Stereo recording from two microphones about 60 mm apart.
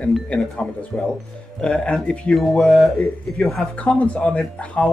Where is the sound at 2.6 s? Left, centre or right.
Centre.